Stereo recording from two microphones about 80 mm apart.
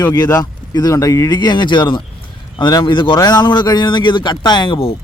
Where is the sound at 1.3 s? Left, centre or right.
Left.